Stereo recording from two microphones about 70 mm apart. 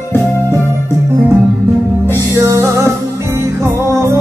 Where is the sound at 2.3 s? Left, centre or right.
Right.